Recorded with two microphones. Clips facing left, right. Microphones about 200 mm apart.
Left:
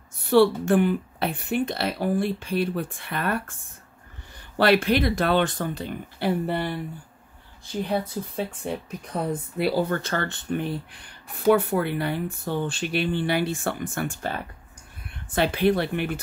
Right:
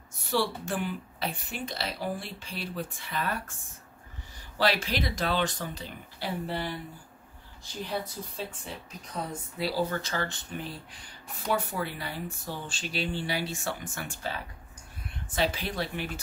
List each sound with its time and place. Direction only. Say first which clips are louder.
0.3 s speech: left 12 dB; 60° left (ahead or behind)
4.6 s speech: left 8 dB; 60° left (ahead or behind)
8.2 s speech: left 9 dB; 70° left (ahead or behind)
8.6 s speech: left 11 dB; 55° left (ahead or behind)